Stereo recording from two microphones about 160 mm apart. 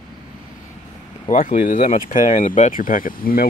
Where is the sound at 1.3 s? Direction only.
55° left (ahead or behind).